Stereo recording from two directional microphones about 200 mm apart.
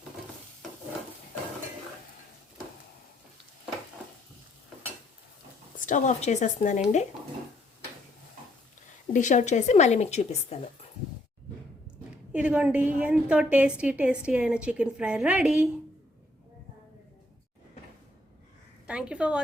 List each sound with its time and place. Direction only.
5.8 s a woman's voice: 40° left (ahead or behind)
9.1 s a woman's voice: 35° left (ahead or behind)
12.3 s a woman's voice: 5° right (ahead or behind)
18.9 s a sound: 5° right (ahead or behind)